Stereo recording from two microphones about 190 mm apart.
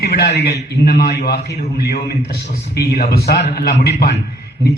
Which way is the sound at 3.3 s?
60° left (ahead or behind).